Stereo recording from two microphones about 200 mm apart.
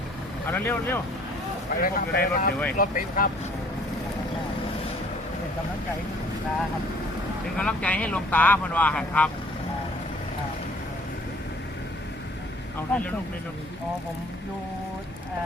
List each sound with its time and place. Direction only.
0.5 s speech: 10° left (ahead or behind)
1.7 s speech: 50° left (ahead or behind)
7.6 s speech: 5° left (ahead or behind)
12.9 s speech: 5° left (ahead or behind)